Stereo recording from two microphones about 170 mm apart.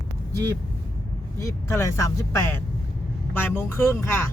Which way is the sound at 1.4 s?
20° left (ahead or behind).